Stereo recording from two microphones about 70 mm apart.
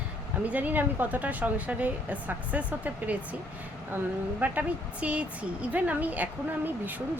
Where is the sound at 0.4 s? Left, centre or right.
Right.